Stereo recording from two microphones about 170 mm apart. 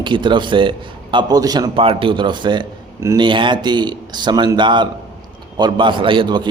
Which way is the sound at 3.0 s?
15° right (ahead or behind).